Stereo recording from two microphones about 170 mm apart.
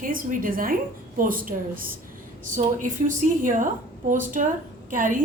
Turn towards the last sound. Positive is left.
turn(degrees=-50)  # may be behind; listen again after turning